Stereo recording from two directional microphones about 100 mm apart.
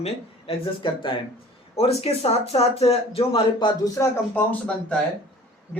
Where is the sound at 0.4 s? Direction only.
55° left (ahead or behind).